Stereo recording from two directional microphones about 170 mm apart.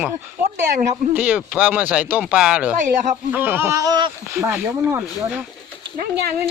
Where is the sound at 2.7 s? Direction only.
45° right (ahead or behind).